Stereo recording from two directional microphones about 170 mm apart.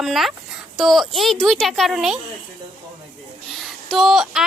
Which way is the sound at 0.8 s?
Centre (ahead or behind).